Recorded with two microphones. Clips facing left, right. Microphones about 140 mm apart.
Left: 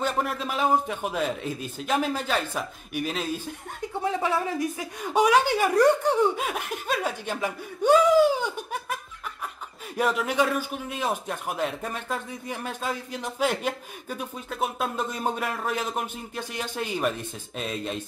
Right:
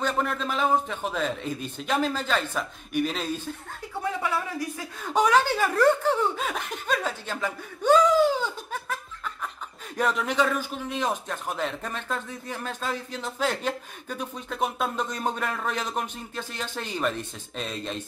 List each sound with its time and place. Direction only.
0.0 s a man's voice: 10° left (ahead or behind)
4.2 s speech: 25° left (ahead or behind)
5.0 s a man's voice: 10° left (ahead or behind)